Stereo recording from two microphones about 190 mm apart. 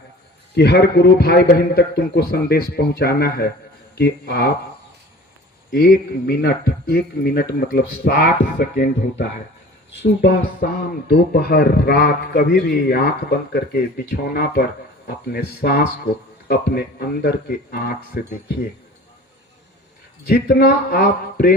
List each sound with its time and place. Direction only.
0.5 s a man's voice: 60° left (ahead or behind)
5.7 s a man's voice: 55° left (ahead or behind)
20.2 s a man's voice: 60° left (ahead or behind)